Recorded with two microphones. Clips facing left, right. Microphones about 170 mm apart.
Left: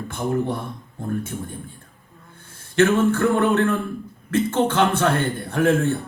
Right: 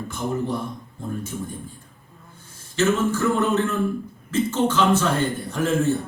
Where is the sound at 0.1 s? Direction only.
60° left (ahead or behind).